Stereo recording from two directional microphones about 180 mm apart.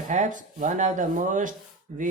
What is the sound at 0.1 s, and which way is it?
Speech, 45° right (ahead or behind).